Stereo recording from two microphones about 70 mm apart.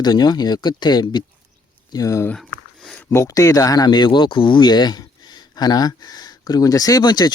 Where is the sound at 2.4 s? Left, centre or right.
Centre.